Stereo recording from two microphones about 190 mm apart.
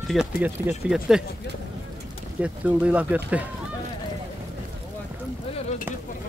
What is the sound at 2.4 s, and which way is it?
Speech, 5° right (ahead or behind).